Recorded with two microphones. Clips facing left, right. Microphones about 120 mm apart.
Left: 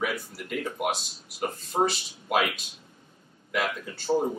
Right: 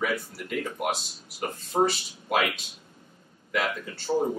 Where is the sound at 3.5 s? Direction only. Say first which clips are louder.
Right 1 dB; centre (ahead or behind).